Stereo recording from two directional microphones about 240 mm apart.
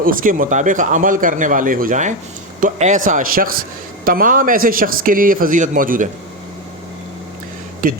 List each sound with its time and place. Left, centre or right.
0.0 s a man's voice: right